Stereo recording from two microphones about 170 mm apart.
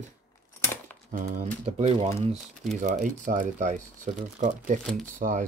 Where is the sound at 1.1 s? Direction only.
50° right (ahead or behind).